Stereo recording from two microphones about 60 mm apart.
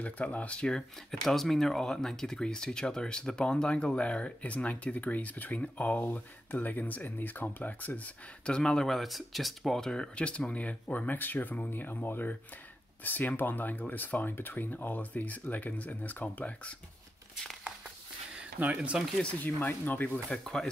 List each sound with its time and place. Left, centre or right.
0.0 s speech: left
18.6 s speech: right
19.4 s speech: left
20.2 s speech: centre